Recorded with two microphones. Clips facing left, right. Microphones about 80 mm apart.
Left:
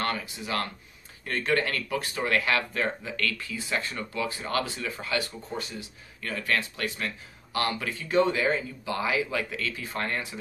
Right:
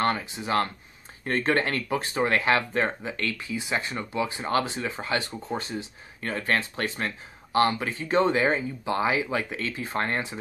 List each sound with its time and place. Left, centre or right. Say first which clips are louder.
0.0 s speech: right 5 dB; right